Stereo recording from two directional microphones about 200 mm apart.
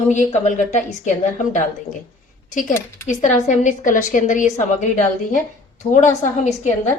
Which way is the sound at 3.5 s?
40° left (ahead or behind).